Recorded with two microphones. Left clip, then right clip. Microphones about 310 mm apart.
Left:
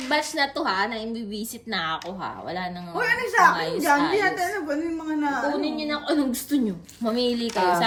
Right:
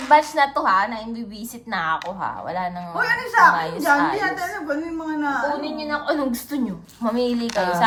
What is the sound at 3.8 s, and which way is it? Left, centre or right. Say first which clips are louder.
A woman's voice: right 1 dB; centre.